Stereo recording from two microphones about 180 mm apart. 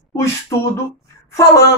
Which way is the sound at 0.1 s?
15° left (ahead or behind).